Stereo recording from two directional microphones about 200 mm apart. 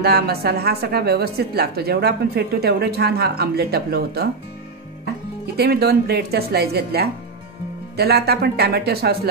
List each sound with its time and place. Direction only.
0.0 s a woman's voice: 50° right (ahead or behind)
5.6 s a woman's voice: 55° right (ahead or behind)